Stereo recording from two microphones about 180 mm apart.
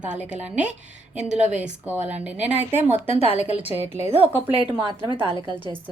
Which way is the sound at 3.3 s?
35° left (ahead or behind).